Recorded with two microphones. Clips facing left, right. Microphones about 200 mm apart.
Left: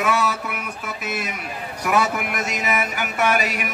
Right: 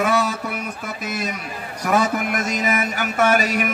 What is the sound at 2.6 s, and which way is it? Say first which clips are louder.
A man's voice: right 2 dB; 40° right (ahead or behind).